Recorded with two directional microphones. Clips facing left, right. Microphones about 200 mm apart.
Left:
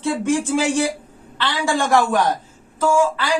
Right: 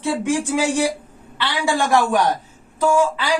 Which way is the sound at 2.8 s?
15° right (ahead or behind).